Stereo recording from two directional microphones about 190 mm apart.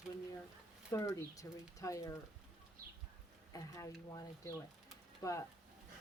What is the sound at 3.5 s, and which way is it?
Speech, 15° left (ahead or behind).